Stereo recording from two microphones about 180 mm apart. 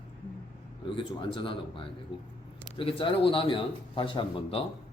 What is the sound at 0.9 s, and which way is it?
A man's voice, 30° left (ahead or behind).